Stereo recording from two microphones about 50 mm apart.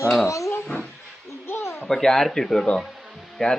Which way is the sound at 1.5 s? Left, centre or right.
Left.